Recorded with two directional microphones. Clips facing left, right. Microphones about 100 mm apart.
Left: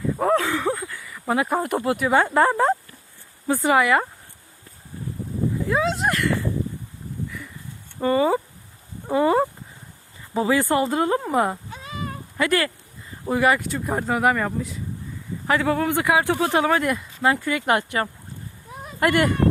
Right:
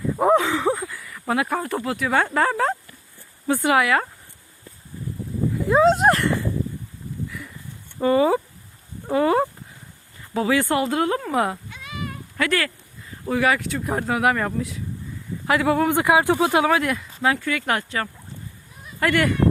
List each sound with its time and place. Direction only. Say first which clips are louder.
0.2 s a sound: right 4 dB; 15° right (ahead or behind)
0.9 s a sound: even; centre (ahead or behind)
1.2 s speech: left 1 dB; 5° left (ahead or behind)
1.5 s speech: left 3 dB; 15° left (ahead or behind)
5.8 s speech: right 7 dB; 40° right (ahead or behind)
7.3 s a sound: even; centre (ahead or behind)
7.9 s speech: right 2 dB; 5° right (ahead or behind)
11.7 s sheep: left 1 dB; 35° left (ahead or behind)
12.4 s speech: left 1 dB; 10° left (ahead or behind); by 16.6 s 15° right (ahead or behind)
16.6 s speech: even; centre (ahead or behind); by 19.3 s 15° left (ahead or behind)